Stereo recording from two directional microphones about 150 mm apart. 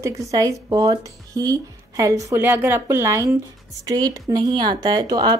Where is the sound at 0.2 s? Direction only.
20° right (ahead or behind).